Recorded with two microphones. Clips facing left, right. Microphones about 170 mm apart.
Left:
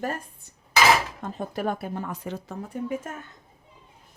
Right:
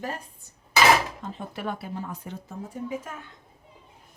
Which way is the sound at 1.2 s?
40° left (ahead or behind).